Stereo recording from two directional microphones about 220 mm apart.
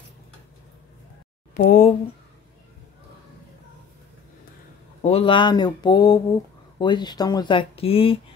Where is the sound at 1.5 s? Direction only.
35° left (ahead or behind).